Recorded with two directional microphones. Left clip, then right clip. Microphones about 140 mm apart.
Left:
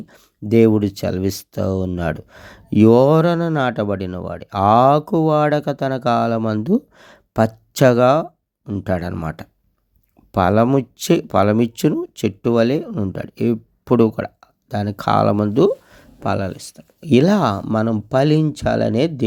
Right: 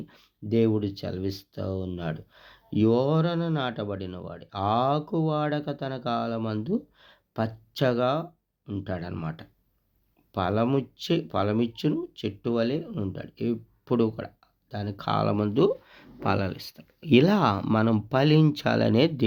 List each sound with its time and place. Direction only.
0.4 s speech: 70° left (ahead or behind)
12.9 s speech: 45° left (ahead or behind)
13.1 s speech: 65° left (ahead or behind)
15.5 s speech: 40° left (ahead or behind)